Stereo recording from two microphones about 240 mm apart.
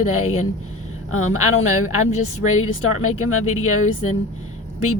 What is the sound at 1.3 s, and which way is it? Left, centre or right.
Speech, left.